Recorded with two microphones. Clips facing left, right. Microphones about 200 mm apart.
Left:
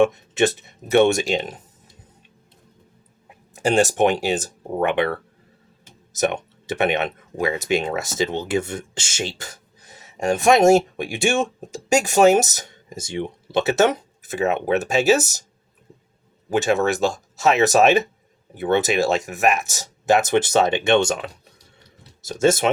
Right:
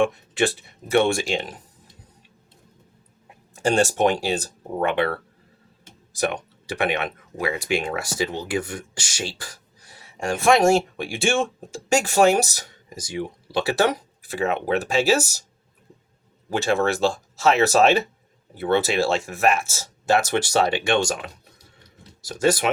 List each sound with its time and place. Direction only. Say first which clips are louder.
0.0 s speech: left 4 dB; 20° left (ahead or behind)
3.7 s speech: left 2 dB; 15° left (ahead or behind)
6.1 s speech: left 3 dB; 20° left (ahead or behind)
16.5 s speech: left 2 dB; 20° left (ahead or behind)